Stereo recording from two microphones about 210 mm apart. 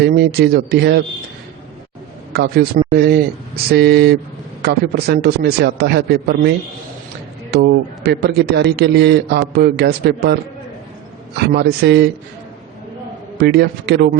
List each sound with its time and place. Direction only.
0.0 s a man's voice: 50° right (ahead or behind)
2.3 s a man's voice: 50° right (ahead or behind)
7.5 s a man's voice: 55° right (ahead or behind)
11.4 s a man's voice: 50° right (ahead or behind)
13.4 s a man's voice: 50° right (ahead or behind)